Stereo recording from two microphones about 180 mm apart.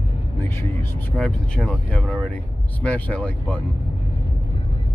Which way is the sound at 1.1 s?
5° left (ahead or behind).